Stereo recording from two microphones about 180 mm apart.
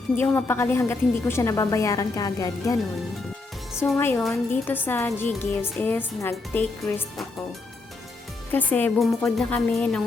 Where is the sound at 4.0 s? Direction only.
10° left (ahead or behind).